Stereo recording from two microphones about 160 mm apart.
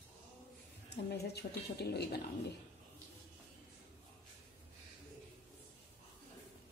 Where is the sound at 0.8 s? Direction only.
90° left.